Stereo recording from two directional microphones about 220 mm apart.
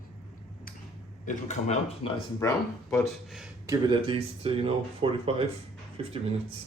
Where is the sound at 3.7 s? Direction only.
20° right (ahead or behind).